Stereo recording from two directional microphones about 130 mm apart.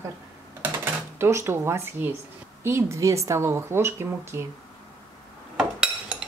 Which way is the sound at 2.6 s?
20° right (ahead or behind).